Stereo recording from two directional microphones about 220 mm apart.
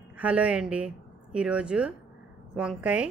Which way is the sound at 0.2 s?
5° right (ahead or behind).